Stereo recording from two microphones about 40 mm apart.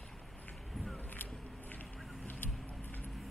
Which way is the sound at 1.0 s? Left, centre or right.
Left.